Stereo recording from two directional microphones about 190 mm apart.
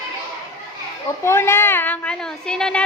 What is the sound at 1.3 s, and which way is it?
A woman's voice, 15° left (ahead or behind).